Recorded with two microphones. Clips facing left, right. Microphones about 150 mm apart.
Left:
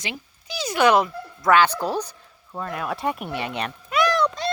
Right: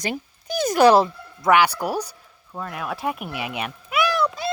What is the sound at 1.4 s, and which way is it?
Speech, 15° right (ahead or behind).